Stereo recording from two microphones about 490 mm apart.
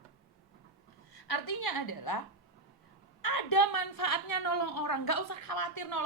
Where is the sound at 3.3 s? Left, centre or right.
Left.